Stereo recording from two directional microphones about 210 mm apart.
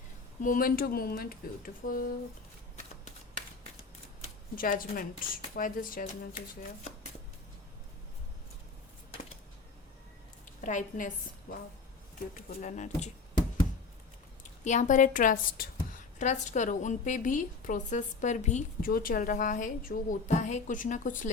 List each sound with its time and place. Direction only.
0.4 s speech: 40° left (ahead or behind)
4.5 s a woman's voice: 40° left (ahead or behind)
10.6 s a woman's voice: 40° left (ahead or behind)
14.6 s a woman's voice: 35° left (ahead or behind)